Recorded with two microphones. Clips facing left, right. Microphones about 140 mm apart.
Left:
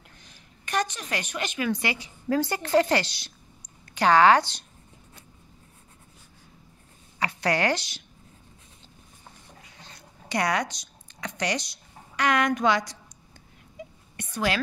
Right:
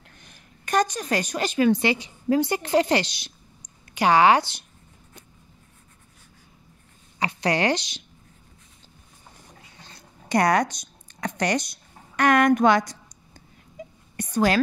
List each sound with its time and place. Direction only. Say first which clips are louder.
0.2 s a woman's voice: right 3 dB; 50° right (ahead or behind); by 4.6 s 10° right (ahead or behind)
7.2 s speech: right 2 dB; 20° right (ahead or behind)
10.2 s speech: right 6 dB; 45° right (ahead or behind)
13.8 s whispering: right 2 dB; 40° right (ahead or behind)
14.1 s a sound: right 6 dB; 40° right (ahead or behind)